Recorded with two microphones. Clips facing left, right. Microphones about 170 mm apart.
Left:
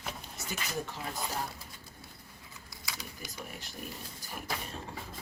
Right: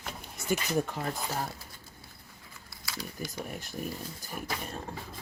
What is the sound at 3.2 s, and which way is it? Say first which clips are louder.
Speech: right 8 dB; 45° right (ahead or behind).